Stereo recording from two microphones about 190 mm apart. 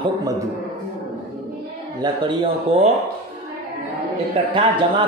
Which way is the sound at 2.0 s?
25° right (ahead or behind).